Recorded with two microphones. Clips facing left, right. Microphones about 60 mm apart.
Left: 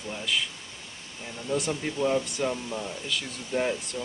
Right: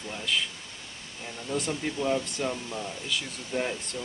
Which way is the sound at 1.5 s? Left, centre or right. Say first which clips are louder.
Left 2 dB; centre.